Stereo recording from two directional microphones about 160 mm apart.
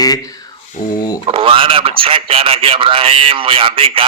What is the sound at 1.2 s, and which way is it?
A man's voice, 35° right (ahead or behind).